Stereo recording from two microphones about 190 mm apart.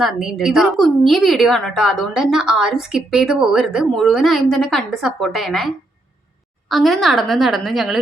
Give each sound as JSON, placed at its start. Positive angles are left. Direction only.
{"t": 0.0, "sound": "a woman's voice", "side_deg": 0}